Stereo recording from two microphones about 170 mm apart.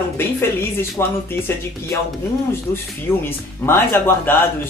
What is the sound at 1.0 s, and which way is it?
Speech, 15° left (ahead or behind).